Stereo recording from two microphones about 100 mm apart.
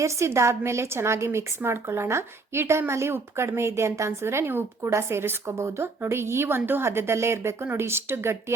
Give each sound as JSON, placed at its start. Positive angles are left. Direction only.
{"t": 0.0, "sound": "a woman's voice", "side_deg": -30}